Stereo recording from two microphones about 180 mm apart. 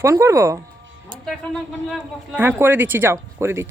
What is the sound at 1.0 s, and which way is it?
Speech, centre (ahead or behind).